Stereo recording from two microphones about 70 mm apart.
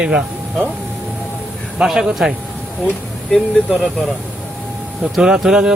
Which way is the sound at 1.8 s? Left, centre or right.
Centre.